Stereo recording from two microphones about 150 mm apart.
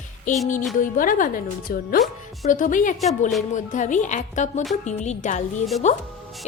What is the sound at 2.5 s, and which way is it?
A woman's voice, 60° left (ahead or behind).